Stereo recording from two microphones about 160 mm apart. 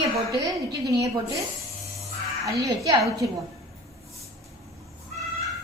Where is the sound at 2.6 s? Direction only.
20° right (ahead or behind).